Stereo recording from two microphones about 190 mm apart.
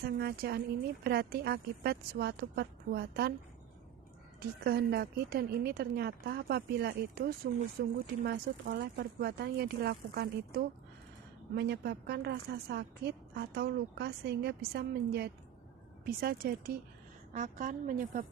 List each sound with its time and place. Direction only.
0.0 s a woman's voice: 55° right (ahead or behind)
4.4 s a woman's voice: 55° right (ahead or behind)